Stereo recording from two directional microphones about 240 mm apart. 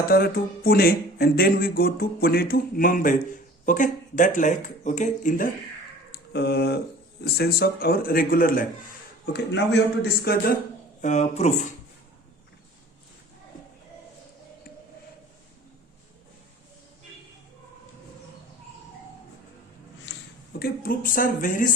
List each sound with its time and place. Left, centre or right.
0.1 s speech: left
6.1 s a sound: left
7.3 s a man's voice: left
11.0 s speech: left
20.1 s a sound: left
20.6 s speech: left